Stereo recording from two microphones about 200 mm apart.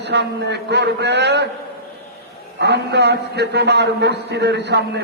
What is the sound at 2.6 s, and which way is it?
A man's voice, 60° right (ahead or behind).